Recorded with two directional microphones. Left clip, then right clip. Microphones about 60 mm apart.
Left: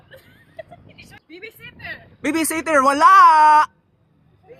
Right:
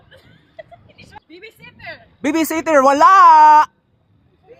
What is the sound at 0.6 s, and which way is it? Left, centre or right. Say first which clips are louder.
Vehicle: even; right.